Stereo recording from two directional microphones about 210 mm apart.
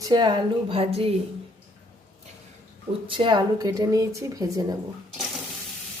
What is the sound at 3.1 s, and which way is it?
Speech, 25° right (ahead or behind).